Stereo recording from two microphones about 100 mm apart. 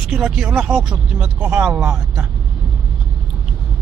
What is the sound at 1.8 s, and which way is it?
Speech, 25° right (ahead or behind).